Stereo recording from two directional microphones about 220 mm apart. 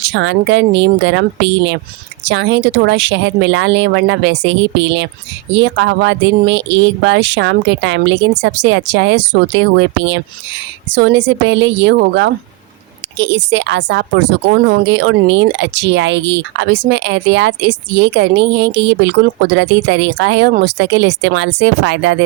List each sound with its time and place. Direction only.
0.0 s a woman's voice: 55° right (ahead or behind)